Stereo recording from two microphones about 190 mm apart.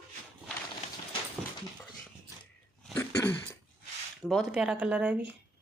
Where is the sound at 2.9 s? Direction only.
15° left (ahead or behind).